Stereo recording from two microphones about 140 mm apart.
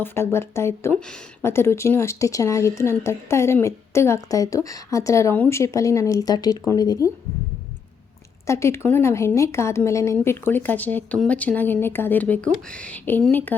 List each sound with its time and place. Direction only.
0.0 s speech: 15° left (ahead or behind)
8.4 s speech: 20° left (ahead or behind)